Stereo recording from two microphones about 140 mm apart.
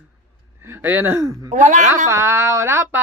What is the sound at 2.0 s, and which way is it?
Speech, 20° right (ahead or behind).